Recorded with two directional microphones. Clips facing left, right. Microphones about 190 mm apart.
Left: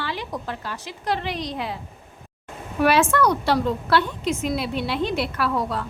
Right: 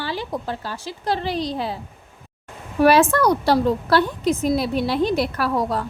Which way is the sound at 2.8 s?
40° right (ahead or behind).